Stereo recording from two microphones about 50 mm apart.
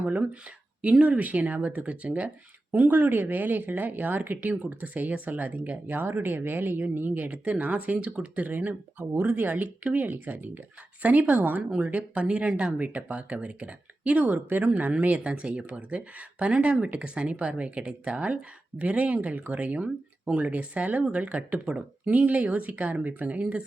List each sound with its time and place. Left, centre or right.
0.0 s speech: right
0.8 s speech: right
2.7 s speech: right
6.0 s speech: right